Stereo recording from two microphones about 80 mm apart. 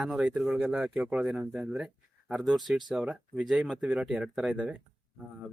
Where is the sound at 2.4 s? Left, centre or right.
Centre.